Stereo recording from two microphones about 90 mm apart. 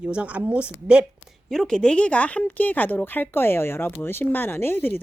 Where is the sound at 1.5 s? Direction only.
5° left (ahead or behind); by 5.0 s 20° left (ahead or behind).